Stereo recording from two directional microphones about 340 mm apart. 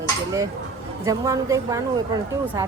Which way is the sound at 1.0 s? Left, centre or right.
Centre.